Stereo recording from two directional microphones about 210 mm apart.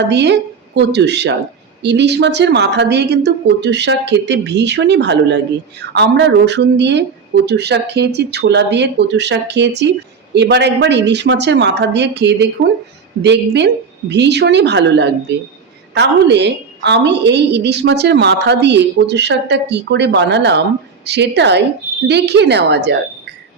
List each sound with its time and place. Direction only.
0.1 s a woman's voice: 55° right (ahead or behind)